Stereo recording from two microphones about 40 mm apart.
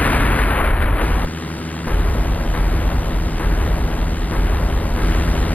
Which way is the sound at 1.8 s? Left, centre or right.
Left.